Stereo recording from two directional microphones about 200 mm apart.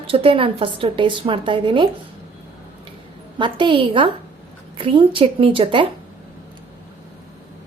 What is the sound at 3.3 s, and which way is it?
A woman's voice, 25° right (ahead or behind).